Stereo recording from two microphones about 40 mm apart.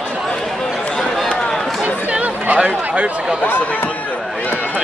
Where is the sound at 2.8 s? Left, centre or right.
Right.